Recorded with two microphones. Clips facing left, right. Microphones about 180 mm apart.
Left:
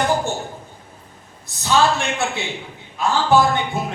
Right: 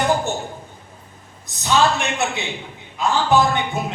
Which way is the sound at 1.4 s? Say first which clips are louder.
Even; 20° right (ahead or behind).